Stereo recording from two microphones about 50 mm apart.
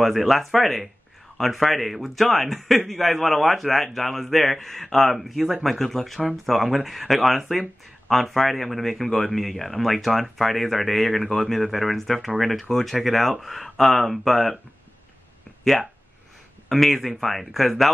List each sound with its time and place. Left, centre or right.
0.0 s a man's voice: centre
16.6 s a man's voice: centre